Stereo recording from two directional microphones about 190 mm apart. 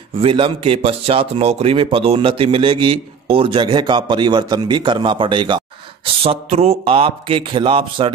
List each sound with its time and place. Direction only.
0.2 s a man's voice: 25° right (ahead or behind)